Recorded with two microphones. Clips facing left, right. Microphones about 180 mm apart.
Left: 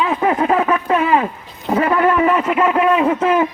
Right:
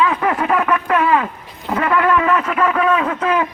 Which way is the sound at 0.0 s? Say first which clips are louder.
Left 1 dB; 25° left (ahead or behind).